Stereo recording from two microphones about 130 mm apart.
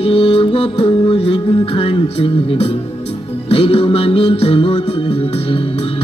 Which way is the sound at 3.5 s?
45° left (ahead or behind).